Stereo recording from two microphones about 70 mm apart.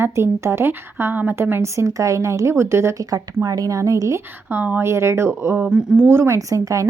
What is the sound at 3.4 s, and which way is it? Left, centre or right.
Speech, right.